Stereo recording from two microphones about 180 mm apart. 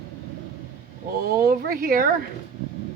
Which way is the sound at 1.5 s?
55° right (ahead or behind).